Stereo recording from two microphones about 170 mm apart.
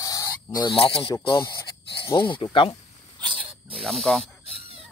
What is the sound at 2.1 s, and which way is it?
Speech, 30° left (ahead or behind).